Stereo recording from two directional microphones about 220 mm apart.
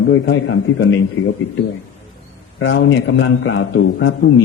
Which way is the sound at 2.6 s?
55° left (ahead or behind).